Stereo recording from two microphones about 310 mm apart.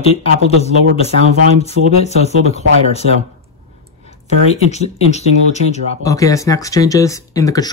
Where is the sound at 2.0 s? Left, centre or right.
Left.